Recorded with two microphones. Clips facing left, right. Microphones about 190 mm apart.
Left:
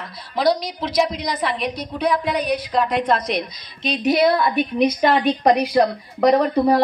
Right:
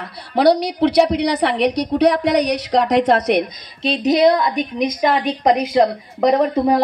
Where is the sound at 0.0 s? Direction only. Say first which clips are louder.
Right 5 dB; 65° right (ahead or behind).